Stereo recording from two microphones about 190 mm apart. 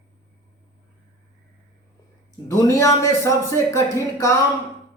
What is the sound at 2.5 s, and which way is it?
Speech, 15° left (ahead or behind).